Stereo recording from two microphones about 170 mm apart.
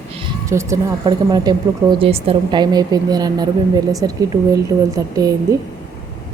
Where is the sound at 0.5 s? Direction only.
20° right (ahead or behind).